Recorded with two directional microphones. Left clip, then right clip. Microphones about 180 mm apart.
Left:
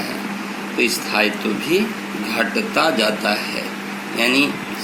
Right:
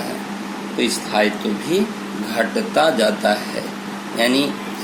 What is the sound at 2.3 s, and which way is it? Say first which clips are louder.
Speech: right 1 dB; 40° right (ahead or behind).